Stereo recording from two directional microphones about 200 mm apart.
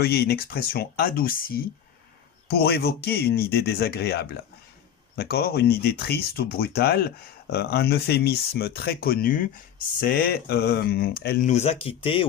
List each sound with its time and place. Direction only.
0.0 s speech: 50° left (ahead or behind)
11.4 s speech: 30° left (ahead or behind)